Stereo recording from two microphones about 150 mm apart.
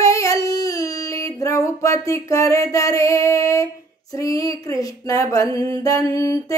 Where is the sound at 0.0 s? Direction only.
20° left (ahead or behind).